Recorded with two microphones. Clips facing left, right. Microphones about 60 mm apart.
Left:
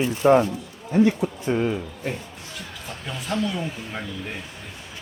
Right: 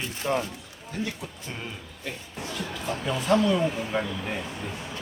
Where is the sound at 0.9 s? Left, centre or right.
Left.